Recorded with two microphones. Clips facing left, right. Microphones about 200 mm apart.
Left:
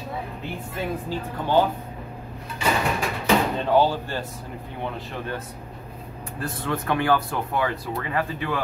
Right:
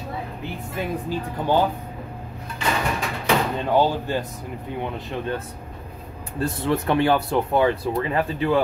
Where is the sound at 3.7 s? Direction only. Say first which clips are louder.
Right 1 dB; 15° right (ahead or behind).